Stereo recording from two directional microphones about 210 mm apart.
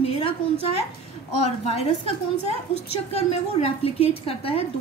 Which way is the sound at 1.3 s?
30° left (ahead or behind).